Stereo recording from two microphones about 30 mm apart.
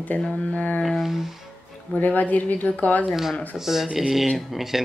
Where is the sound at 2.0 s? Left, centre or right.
Left.